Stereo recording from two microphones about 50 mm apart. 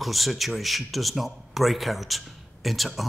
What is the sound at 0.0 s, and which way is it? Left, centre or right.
Speech, centre.